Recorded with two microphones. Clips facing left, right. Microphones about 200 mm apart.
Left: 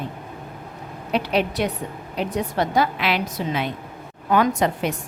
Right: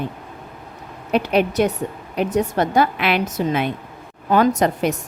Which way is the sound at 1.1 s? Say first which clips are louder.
Right 4 dB; 50° right (ahead or behind).